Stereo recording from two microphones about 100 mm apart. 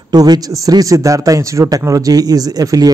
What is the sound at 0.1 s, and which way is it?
A man's voice, 40° right (ahead or behind).